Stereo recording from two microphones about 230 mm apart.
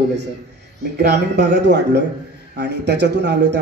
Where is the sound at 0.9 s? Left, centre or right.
Right.